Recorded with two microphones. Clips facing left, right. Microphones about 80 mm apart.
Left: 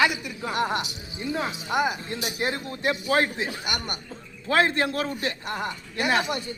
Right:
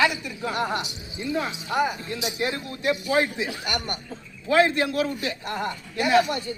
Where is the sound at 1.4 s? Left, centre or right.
Centre.